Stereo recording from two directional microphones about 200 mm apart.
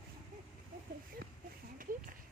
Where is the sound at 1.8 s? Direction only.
45° right (ahead or behind).